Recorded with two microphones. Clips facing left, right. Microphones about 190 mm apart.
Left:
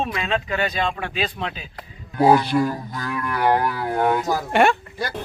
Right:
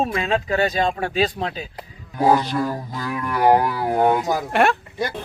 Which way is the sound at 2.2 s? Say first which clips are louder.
Left 2 dB; 10° left (ahead or behind).